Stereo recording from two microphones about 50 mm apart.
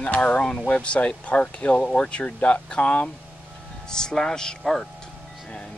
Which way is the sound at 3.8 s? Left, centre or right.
Centre.